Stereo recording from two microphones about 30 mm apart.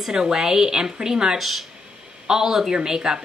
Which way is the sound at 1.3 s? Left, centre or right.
Centre.